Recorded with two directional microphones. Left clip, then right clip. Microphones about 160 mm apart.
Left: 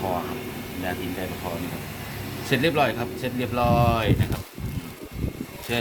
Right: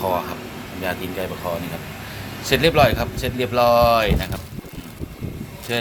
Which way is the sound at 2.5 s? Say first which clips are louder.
Right 6 dB; 45° right (ahead or behind).